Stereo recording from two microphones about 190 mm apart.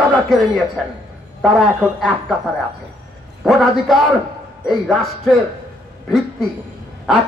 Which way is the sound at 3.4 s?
Centre (ahead or behind).